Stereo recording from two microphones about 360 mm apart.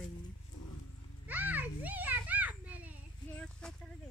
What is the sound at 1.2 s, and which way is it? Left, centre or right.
Children playing, centre.